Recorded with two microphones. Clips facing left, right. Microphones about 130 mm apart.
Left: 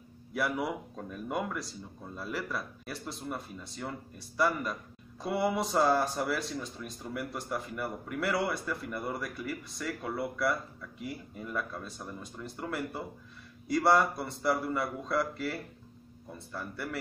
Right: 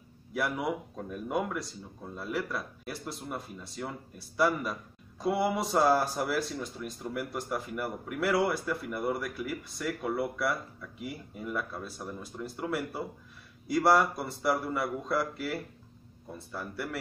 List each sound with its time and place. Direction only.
0.3 s speech: centre (ahead or behind)